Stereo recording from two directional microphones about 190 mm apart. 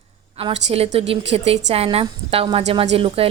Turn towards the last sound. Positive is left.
turn(degrees=-30)  # may be behind; listen again after turning